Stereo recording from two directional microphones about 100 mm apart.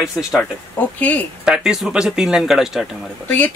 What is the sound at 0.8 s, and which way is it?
Speech, 20° left (ahead or behind).